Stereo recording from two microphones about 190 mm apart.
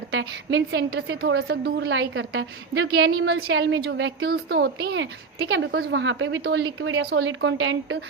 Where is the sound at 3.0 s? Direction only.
65° right (ahead or behind).